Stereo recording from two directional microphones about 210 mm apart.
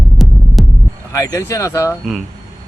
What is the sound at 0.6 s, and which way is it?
Hum, centre (ahead or behind).